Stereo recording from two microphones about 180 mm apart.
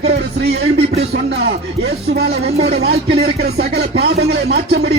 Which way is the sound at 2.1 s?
60° right (ahead or behind).